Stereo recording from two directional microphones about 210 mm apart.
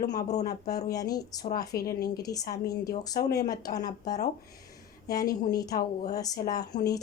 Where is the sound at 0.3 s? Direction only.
35° left (ahead or behind).